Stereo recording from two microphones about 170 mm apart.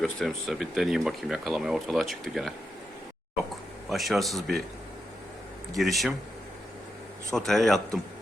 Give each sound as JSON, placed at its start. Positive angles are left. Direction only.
{"t": 0.0, "sound": "speech", "side_deg": 0}
{"t": 3.8, "sound": "speech", "side_deg": 0}
{"t": 5.7, "sound": "speech", "side_deg": 0}
{"t": 7.3, "sound": "speech", "side_deg": 0}